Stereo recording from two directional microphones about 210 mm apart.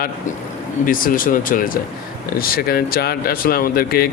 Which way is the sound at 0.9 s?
40° left (ahead or behind).